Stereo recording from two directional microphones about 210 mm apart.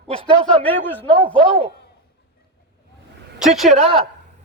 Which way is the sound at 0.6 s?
10° left (ahead or behind).